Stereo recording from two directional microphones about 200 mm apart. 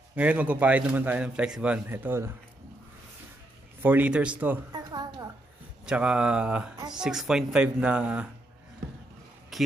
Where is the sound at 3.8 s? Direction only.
10° right (ahead or behind).